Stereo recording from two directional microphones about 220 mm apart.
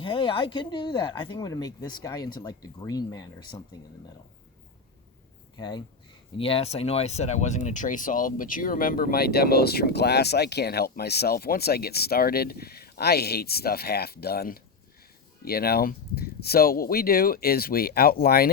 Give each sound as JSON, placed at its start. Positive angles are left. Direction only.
{"t": 0.0, "sound": "speech", "side_deg": 25}
{"t": 5.5, "sound": "speech", "side_deg": 20}